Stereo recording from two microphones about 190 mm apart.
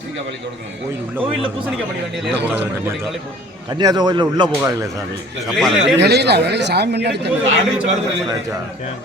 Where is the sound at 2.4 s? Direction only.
10° right (ahead or behind).